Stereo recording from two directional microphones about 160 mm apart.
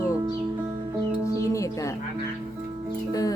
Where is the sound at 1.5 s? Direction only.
20° left (ahead or behind).